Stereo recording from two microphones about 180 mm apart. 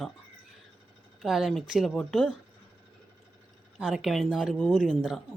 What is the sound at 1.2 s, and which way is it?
A woman's voice, centre (ahead or behind).